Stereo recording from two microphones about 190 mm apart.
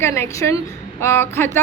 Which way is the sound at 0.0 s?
15° left (ahead or behind).